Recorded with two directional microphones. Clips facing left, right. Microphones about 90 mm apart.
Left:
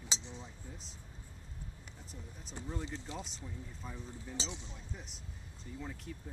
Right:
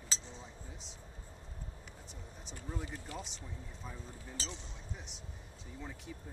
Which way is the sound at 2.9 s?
25° left (ahead or behind).